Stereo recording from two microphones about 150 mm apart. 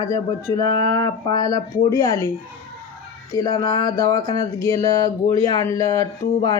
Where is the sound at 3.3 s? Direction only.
25° left (ahead or behind).